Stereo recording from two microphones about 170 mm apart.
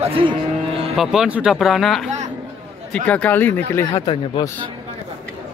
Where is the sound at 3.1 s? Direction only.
10° left (ahead or behind).